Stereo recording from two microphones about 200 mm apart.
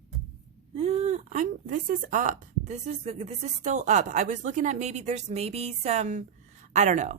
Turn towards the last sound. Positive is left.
turn(degrees=-40)  # may be behind; listen again after turning